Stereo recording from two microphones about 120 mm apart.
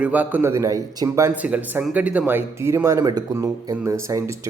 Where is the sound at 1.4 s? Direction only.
15° right (ahead or behind).